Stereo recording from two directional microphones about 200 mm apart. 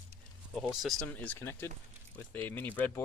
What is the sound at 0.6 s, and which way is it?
Speech, centre (ahead or behind).